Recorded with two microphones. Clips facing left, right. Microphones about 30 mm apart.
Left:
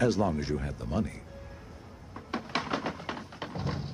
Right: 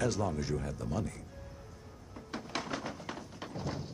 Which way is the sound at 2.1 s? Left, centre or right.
Left.